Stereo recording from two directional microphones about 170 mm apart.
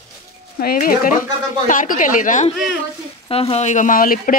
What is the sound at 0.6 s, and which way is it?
Speech, 55° left (ahead or behind).